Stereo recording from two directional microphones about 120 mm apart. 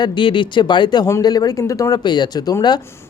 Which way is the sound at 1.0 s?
30° left (ahead or behind).